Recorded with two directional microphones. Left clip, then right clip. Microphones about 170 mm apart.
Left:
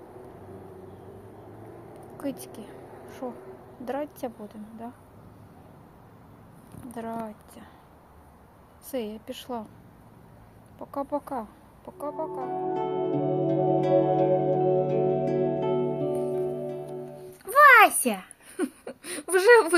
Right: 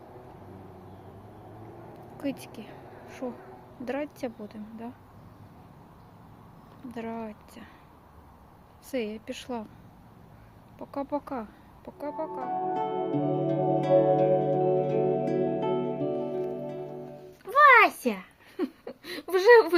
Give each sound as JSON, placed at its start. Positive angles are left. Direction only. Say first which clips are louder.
{"t": 2.2, "sound": "a woman's voice", "louder": "even", "side_deg": -15}
{"t": 6.9, "sound": "a woman's voice", "louder": "left 2 dB", "side_deg": -10}
{"t": 8.9, "sound": "a woman's voice", "louder": "even", "side_deg": -15}
{"t": 10.8, "sound": "a woman's voice", "louder": "left 2 dB", "side_deg": -15}
{"t": 12.4, "sound": "music", "louder": "right 1 dB", "side_deg": 0}
{"t": 17.5, "sound": "a sound", "louder": "left 2 dB", "side_deg": 0}